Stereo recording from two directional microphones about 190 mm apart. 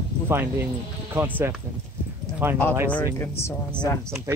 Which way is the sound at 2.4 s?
10° right (ahead or behind).